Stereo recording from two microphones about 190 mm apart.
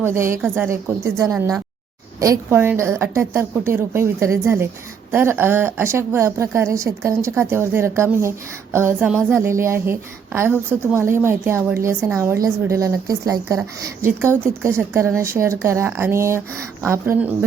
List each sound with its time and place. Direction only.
0.0 s speech: 15° right (ahead or behind)